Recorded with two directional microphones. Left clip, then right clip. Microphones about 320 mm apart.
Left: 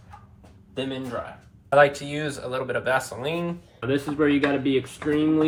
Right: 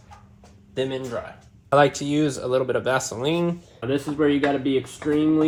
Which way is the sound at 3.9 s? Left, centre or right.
Centre.